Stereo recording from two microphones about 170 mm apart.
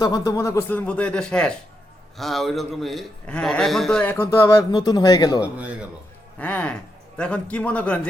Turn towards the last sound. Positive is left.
turn(degrees=10)  # may be behind; listen again after turning